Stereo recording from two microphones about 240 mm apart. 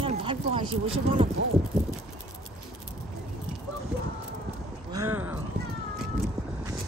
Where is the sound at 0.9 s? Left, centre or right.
Right.